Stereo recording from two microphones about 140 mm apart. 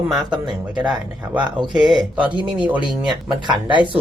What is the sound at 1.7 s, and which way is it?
Speech, 5° right (ahead or behind).